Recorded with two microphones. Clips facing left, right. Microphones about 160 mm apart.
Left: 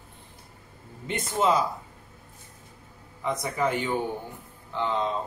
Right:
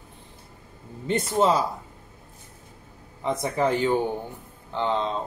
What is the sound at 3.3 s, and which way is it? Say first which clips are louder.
Speech: right 3 dB; 30° right (ahead or behind).